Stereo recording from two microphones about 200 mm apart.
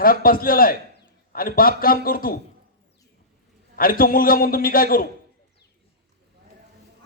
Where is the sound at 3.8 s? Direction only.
45° left (ahead or behind).